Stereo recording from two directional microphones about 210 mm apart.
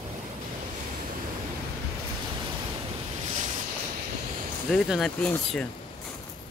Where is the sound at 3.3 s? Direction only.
35° right (ahead or behind).